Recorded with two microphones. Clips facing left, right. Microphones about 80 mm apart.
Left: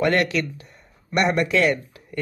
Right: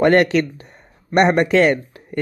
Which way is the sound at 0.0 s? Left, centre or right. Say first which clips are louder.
Right 7 dB; right.